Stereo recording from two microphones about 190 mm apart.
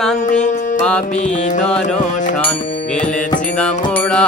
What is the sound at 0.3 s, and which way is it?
Music, 40° left (ahead or behind).